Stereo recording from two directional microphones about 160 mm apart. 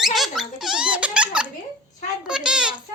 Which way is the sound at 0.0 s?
Centre (ahead or behind).